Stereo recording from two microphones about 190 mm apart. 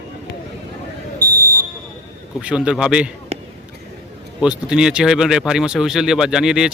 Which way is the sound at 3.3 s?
35° right (ahead or behind).